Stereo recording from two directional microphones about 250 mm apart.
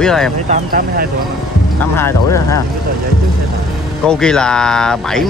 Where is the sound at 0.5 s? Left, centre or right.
Right.